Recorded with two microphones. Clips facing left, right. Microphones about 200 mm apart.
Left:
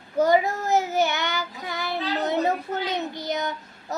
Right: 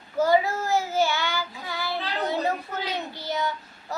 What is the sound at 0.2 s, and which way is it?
Child singing, 20° left (ahead or behind).